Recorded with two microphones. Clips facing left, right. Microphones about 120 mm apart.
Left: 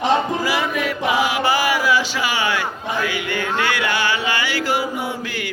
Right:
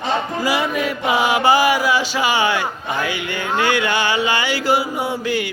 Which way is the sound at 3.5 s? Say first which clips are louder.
Right 5 dB; 25° right (ahead or behind).